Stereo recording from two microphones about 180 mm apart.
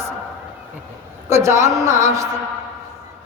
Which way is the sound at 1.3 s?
15° right (ahead or behind).